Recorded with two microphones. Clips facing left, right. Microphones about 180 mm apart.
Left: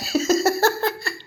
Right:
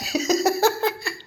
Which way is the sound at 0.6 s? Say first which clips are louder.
Even; centre (ahead or behind).